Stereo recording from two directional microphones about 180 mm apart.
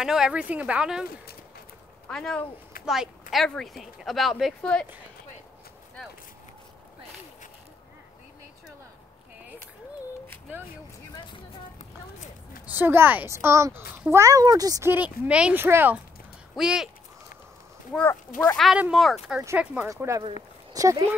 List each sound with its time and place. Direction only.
0.0 s speech: 5° right (ahead or behind)
2.0 s speech: 5° left (ahead or behind)
11.8 s a sound: 40° left (ahead or behind)
12.7 s a child's voice: 10° right (ahead or behind)
18.6 s a child's voice: centre (ahead or behind); by 21.0 s 20° right (ahead or behind)